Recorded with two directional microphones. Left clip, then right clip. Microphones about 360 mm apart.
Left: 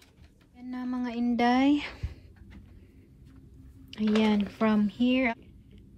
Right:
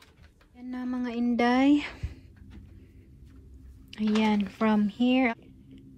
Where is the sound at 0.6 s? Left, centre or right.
Centre.